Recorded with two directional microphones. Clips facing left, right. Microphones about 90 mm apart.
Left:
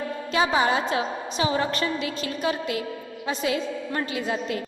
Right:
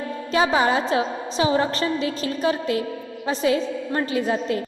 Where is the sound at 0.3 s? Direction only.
30° right (ahead or behind).